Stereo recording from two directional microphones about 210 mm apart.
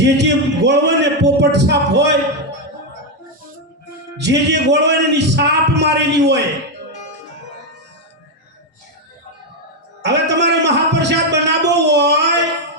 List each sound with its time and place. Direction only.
0.0 s a man's voice: 55° right (ahead or behind)
4.2 s a man's voice: 55° right (ahead or behind)
10.0 s a man's voice: 55° right (ahead or behind)
11.7 s a sound: 55° right (ahead or behind)